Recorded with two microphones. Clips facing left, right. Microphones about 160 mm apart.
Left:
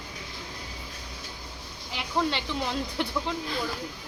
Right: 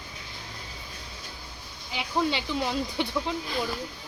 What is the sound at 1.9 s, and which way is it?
Speech, centre (ahead or behind).